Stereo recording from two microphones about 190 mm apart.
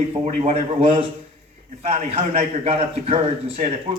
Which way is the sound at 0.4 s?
30° right (ahead or behind).